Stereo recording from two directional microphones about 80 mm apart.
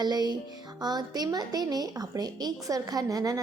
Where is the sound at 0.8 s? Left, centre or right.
Right.